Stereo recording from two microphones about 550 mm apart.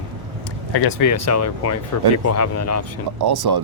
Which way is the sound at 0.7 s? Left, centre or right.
Left.